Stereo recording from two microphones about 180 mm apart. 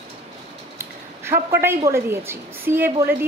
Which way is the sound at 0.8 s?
15° right (ahead or behind).